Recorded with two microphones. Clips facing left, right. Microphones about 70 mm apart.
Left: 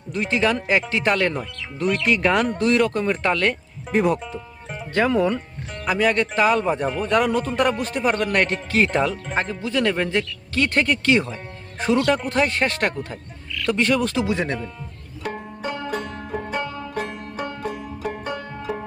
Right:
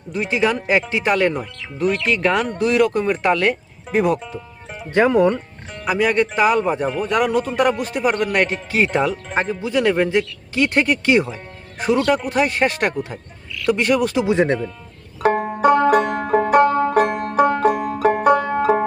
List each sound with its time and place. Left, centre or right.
0.1 s speech: centre
4.8 s speech: centre
5.2 s speech: centre
14.3 s speech: right
15.2 s banjo: right